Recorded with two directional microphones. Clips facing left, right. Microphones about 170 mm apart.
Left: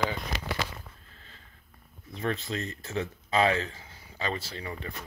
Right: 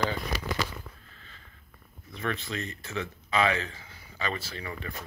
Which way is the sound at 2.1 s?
40° left (ahead or behind).